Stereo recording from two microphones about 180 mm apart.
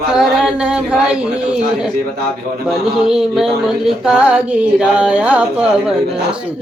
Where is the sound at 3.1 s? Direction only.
Centre (ahead or behind).